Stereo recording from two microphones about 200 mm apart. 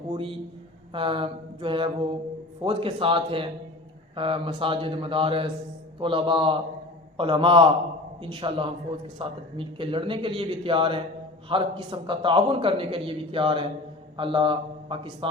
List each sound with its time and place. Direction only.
0.1 s a man's voice: 25° right (ahead or behind)